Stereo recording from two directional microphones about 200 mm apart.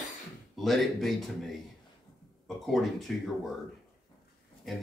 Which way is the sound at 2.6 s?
Centre (ahead or behind).